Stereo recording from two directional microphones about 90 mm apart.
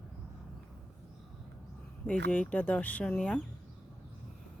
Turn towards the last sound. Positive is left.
turn(degrees=10)  # may be behind; listen again after turning